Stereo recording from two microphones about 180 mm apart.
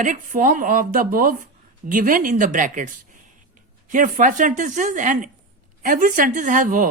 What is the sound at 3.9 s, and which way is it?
A woman's voice, 45° right (ahead or behind).